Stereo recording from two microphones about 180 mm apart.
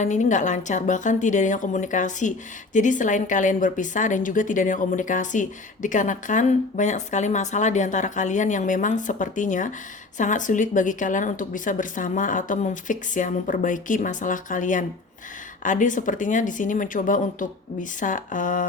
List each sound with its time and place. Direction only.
0.0 s a woman's voice: 40° left (ahead or behind)